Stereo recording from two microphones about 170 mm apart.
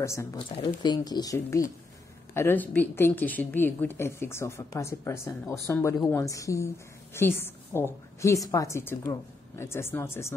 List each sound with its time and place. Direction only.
0.0 s a woman's voice: 15° left (ahead or behind)